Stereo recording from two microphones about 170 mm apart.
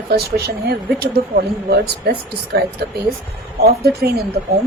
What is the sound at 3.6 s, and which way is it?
Speech, 65° right (ahead or behind).